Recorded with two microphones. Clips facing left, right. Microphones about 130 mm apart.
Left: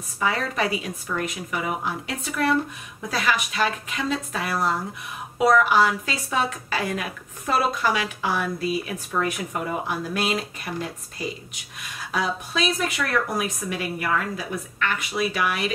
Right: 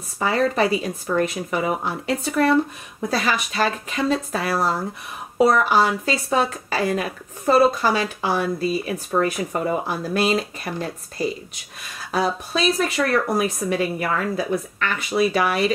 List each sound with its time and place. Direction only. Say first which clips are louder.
0.2 s a woman's voice: right 5 dB; 35° right (ahead or behind)